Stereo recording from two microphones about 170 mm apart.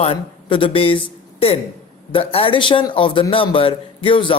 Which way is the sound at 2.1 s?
35° left (ahead or behind).